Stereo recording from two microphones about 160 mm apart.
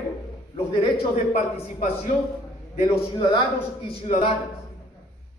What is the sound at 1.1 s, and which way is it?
Speech, 45° left (ahead or behind).